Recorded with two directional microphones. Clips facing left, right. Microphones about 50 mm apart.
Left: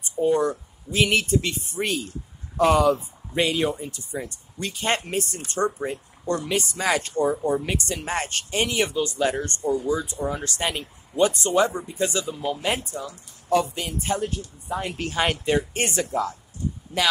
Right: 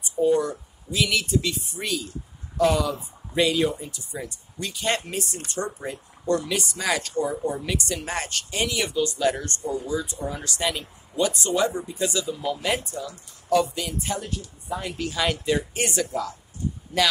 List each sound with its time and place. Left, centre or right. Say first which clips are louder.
0.4 s speech: left 3 dB; left